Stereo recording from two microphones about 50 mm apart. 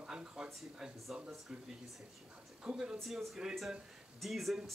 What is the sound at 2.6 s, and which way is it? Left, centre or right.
Speech, centre.